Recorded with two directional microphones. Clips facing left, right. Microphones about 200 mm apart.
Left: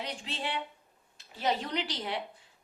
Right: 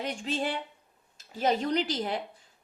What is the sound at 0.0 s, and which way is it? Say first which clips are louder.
A woman's voice: right 6 dB; 45° right (ahead or behind).